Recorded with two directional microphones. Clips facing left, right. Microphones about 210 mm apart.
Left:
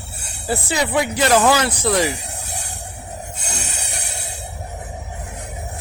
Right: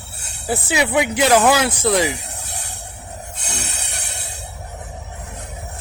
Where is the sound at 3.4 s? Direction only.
10° left (ahead or behind).